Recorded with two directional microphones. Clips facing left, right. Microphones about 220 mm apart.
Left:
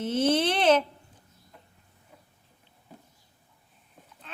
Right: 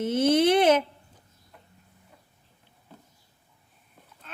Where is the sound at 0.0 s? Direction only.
10° right (ahead or behind).